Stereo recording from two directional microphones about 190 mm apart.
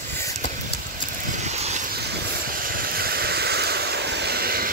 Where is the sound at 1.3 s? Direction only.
35° right (ahead or behind).